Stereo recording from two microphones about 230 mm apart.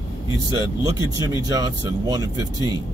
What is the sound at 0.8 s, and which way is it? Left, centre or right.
Speech, centre.